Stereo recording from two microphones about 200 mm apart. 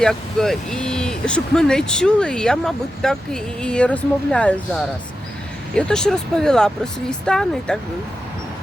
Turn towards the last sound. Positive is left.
turn(degrees=5)  # may be behind; listen again after turning